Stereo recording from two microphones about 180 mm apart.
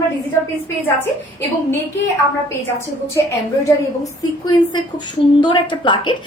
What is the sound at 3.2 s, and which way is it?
A woman's voice, 20° left (ahead or behind).